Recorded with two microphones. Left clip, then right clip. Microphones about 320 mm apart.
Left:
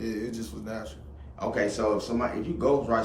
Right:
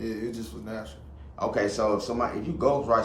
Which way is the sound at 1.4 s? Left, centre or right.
Centre.